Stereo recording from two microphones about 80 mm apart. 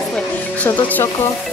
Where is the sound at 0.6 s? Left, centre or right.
Left.